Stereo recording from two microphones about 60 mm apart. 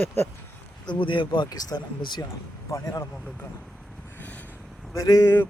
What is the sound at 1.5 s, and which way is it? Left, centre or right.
Speech, left.